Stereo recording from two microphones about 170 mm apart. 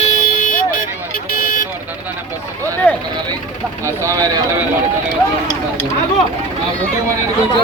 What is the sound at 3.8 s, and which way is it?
Speech, 15° right (ahead or behind).